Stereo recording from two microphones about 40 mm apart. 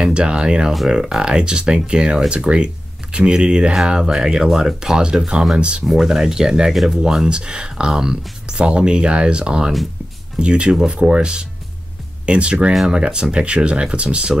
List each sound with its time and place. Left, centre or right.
0.0 s speech: right
5.6 s speech: right
5.9 s speech: centre; by 14.3 s right